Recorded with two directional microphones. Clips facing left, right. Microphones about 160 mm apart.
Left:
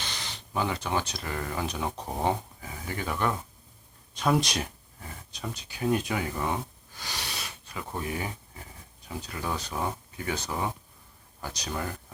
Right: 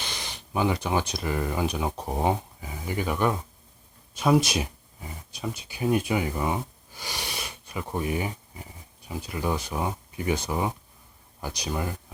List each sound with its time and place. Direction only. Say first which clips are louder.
0.0 s speech: right 2 dB; 15° right (ahead or behind)